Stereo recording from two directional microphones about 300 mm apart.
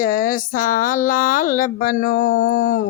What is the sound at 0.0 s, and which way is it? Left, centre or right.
Speech, left.